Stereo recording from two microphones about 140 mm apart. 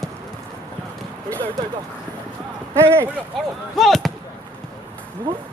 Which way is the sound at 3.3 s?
Centre (ahead or behind).